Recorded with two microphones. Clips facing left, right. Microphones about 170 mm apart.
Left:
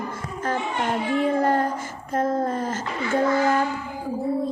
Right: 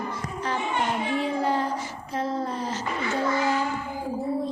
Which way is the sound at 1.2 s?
50° left (ahead or behind).